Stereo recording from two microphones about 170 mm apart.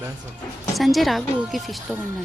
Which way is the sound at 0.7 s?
Centre (ahead or behind).